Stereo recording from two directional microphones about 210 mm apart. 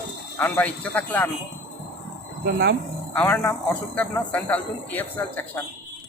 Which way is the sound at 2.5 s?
50° right (ahead or behind).